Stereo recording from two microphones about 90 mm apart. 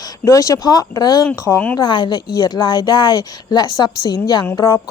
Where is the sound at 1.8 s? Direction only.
60° left (ahead or behind).